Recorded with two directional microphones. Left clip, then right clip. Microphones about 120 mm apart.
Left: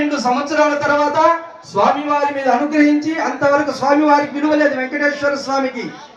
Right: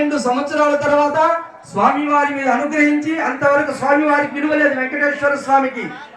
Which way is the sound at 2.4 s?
25° left (ahead or behind).